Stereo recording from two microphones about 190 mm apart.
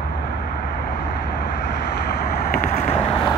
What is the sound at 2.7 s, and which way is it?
Vehicle, 35° left (ahead or behind).